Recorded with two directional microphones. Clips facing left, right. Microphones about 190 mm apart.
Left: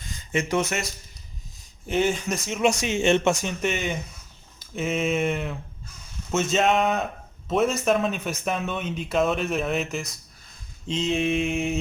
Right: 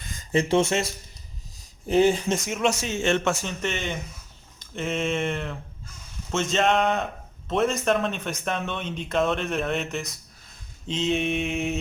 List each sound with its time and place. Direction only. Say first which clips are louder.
0.3 s speech: right 3 dB; 30° right (ahead or behind)
1.9 s speech: right 4 dB; 35° right (ahead or behind)
2.6 s a man's voice: left 2 dB; 15° left (ahead or behind); by 11.8 s centre (ahead or behind)